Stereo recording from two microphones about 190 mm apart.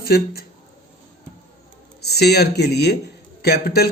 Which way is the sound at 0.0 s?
55° left (ahead or behind).